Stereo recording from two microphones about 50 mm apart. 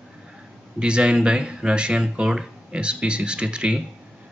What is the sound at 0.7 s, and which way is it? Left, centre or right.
Speech, centre.